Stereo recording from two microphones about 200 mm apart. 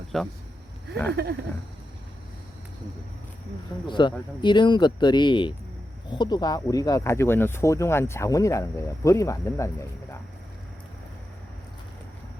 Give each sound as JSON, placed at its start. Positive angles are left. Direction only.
{"t": 0.1, "sound": "speech", "side_deg": 0}
{"t": 1.1, "sound": "a sound", "side_deg": -55}
{"t": 3.8, "sound": "speech", "side_deg": 25}